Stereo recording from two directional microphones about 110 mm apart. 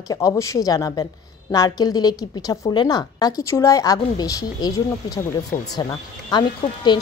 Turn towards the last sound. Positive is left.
turn(degrees=40)  # may be behind; listen again after turning